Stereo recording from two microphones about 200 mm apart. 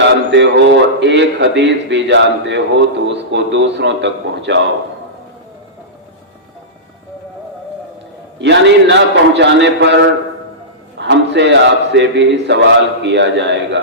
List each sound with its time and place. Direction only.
0.0 s a man's voice: 65° right (ahead or behind)
8.4 s a man's voice: 60° right (ahead or behind)